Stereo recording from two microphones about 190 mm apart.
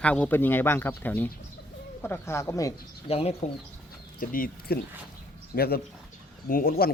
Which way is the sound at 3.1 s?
30° left (ahead or behind).